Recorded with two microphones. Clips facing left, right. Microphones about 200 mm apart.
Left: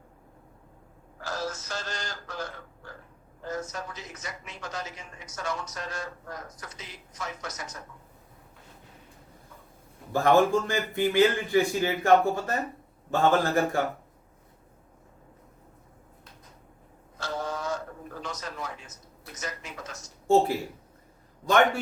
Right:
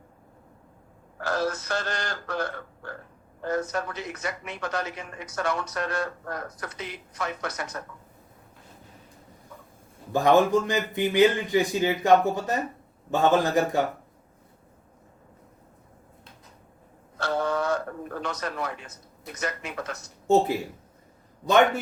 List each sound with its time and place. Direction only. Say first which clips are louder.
1.2 s speech: right 6 dB; 60° right (ahead or behind)
10.1 s speech: right 2 dB; 15° right (ahead or behind)
17.2 s a sound: right 7 dB; 60° right (ahead or behind)
19.3 s speech: right 6 dB; 60° right (ahead or behind)